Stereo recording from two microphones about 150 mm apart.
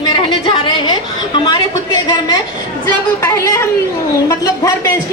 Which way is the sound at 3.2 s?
20° left (ahead or behind).